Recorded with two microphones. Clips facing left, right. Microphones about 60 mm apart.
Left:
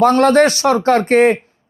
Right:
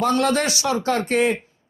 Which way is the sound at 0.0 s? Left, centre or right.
Left.